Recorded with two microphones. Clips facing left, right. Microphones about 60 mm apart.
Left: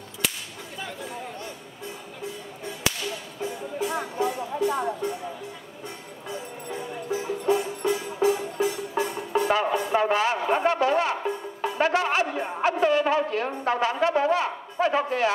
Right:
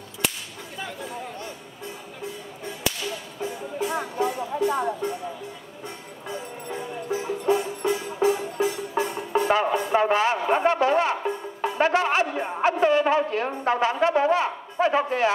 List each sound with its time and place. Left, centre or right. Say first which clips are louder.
3.8 s music: right 1 dB; right
6.2 s music: right 1 dB; right